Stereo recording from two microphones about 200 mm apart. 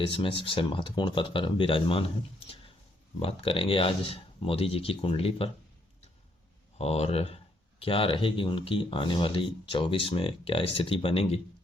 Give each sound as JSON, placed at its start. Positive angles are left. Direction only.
{"t": 0.0, "sound": "speech", "side_deg": 25}
{"t": 3.2, "sound": "speech", "side_deg": 30}
{"t": 6.7, "sound": "speech", "side_deg": 30}